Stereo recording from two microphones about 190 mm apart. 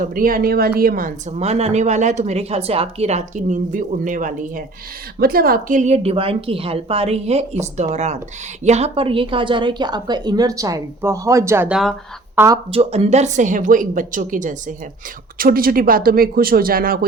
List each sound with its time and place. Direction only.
0.0 s a woman's voice: 50° right (ahead or behind)
1.4 s a woman's voice: 35° right (ahead or behind); by 12.5 s 10° right (ahead or behind)
12.7 s a woman's voice: 35° right (ahead or behind); by 17.0 s 50° right (ahead or behind)